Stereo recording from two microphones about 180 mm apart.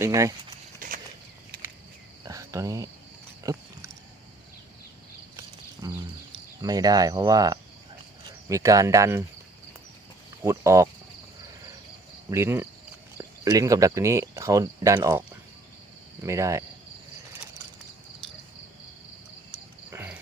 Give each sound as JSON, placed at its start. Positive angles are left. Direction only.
{"t": 0.0, "sound": "speech", "side_deg": -15}
{"t": 0.8, "sound": "a sound", "side_deg": -45}
{"t": 2.2, "sound": "cricket", "side_deg": -20}
{"t": 3.4, "sound": "pig", "side_deg": -15}
{"t": 5.8, "sound": "a sound", "side_deg": -20}
{"t": 6.6, "sound": "speech", "side_deg": -20}
{"t": 10.4, "sound": "speech", "side_deg": -15}
{"t": 12.3, "sound": "speech", "side_deg": -15}
{"t": 16.2, "sound": "speech", "side_deg": -15}
{"t": 19.9, "sound": "cricket", "side_deg": -10}